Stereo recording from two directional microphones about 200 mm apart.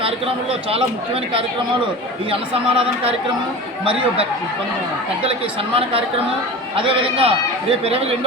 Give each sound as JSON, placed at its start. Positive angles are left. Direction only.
{"t": 0.7, "sound": "a man's voice", "side_deg": -30}
{"t": 5.7, "sound": "a man's voice", "side_deg": -30}